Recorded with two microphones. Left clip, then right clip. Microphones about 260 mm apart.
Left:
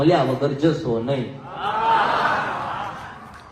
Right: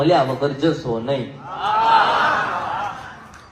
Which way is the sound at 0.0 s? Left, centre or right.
Right.